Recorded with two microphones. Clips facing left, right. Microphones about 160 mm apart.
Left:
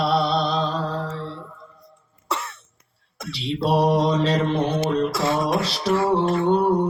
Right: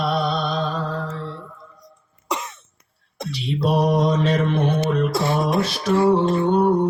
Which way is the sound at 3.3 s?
45° right (ahead or behind).